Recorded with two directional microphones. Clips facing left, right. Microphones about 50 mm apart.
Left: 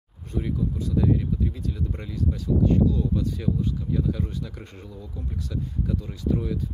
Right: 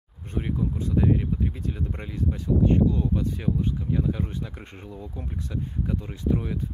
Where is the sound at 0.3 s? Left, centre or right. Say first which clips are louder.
Even; right.